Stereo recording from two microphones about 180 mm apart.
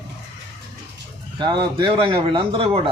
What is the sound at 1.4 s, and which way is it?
Speech, 25° right (ahead or behind).